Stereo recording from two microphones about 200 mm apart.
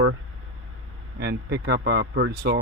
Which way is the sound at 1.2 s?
60° right (ahead or behind).